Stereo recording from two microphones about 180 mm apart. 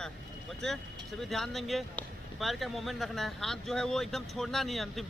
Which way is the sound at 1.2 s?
Centre (ahead or behind).